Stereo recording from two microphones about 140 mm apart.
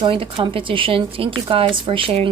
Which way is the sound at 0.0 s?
35° right (ahead or behind).